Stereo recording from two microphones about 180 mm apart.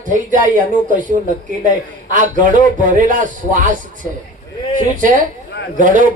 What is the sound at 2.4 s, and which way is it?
A man's voice, 45° right (ahead or behind).